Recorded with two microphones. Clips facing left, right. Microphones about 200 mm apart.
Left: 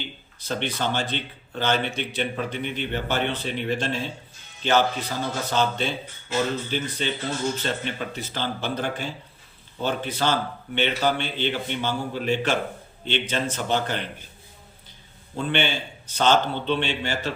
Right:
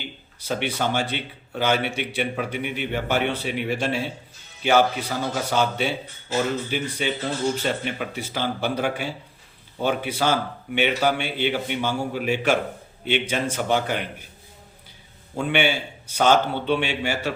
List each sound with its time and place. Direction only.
0.0 s a man's voice: 10° right (ahead or behind)
15.4 s a man's voice: 10° right (ahead or behind)